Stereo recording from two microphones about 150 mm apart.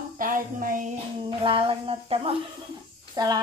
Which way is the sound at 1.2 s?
35° right (ahead or behind).